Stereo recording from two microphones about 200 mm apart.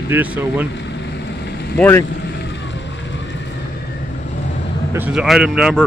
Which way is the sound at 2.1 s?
55° left (ahead or behind).